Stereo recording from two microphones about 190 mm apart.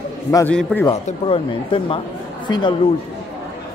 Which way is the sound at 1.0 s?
30° left (ahead or behind).